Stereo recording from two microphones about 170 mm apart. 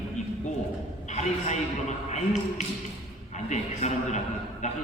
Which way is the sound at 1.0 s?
45° left (ahead or behind).